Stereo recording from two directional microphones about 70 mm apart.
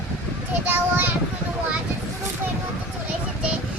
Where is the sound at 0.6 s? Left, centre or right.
Right.